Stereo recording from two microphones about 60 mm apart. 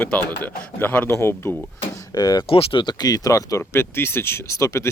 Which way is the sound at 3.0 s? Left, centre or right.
Left.